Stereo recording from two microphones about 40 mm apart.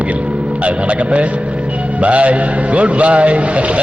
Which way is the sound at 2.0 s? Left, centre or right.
Right.